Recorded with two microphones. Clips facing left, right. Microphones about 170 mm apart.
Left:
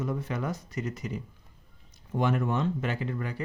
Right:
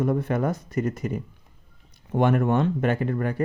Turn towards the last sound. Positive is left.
turn(degrees=-55)  # may be behind; listen again after turning